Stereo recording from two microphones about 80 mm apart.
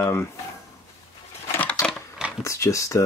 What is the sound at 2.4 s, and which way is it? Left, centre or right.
Speech, left.